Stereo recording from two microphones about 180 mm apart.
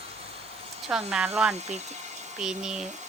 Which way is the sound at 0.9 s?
5° right (ahead or behind).